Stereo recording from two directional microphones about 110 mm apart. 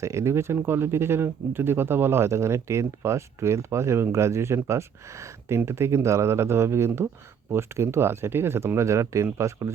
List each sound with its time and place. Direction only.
0.0 s speech: 25° right (ahead or behind)